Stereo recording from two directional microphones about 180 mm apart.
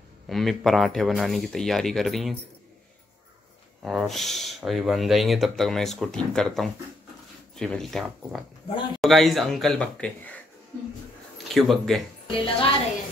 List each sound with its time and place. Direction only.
0.3 s speech: centre (ahead or behind)
3.8 s speech: centre (ahead or behind)
8.6 s speech: 25° left (ahead or behind)
9.0 s speech: centre (ahead or behind)
11.4 s speech: centre (ahead or behind)
12.3 s a woman's voice: 30° left (ahead or behind)